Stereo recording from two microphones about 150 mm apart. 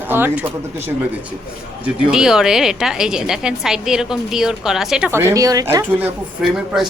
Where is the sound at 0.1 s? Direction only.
15° right (ahead or behind).